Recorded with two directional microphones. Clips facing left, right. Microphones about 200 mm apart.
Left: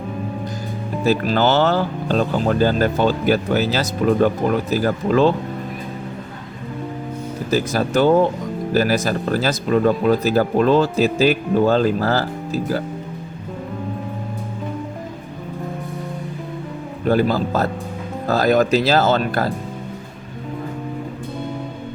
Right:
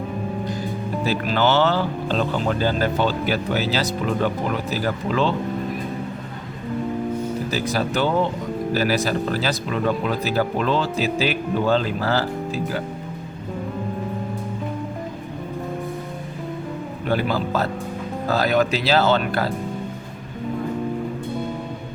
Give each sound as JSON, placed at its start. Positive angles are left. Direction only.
{"t": 1.0, "sound": "speech", "side_deg": 40}
{"t": 7.5, "sound": "speech", "side_deg": 45}
{"t": 17.1, "sound": "speech", "side_deg": 40}